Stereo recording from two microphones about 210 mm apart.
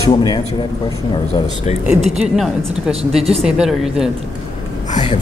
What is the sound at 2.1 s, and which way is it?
Speech, centre (ahead or behind).